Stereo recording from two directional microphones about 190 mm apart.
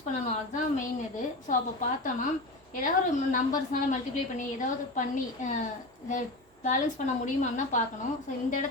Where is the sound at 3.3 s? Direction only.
45° left (ahead or behind).